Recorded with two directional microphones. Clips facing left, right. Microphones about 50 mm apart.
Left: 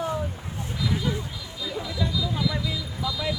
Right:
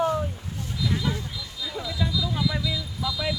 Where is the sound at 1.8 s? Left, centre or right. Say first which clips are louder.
Right 1 dB; centre.